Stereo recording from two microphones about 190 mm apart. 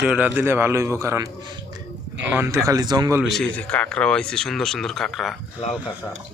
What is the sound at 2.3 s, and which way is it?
Speech, 15° right (ahead or behind).